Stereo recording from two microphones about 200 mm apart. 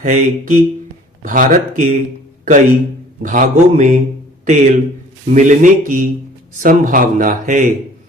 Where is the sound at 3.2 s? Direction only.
40° right (ahead or behind).